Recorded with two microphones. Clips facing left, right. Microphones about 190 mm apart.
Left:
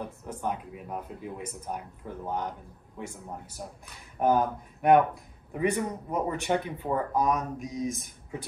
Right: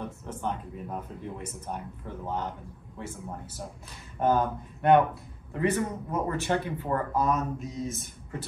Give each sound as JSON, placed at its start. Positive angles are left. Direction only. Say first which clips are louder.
{"t": 0.2, "sound": "speech", "louder": "left 2 dB", "side_deg": 10}